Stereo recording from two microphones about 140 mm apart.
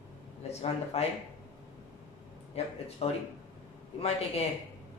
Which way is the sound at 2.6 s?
45° left (ahead or behind).